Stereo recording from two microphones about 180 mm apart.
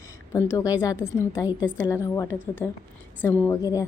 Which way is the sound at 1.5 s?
5° right (ahead or behind).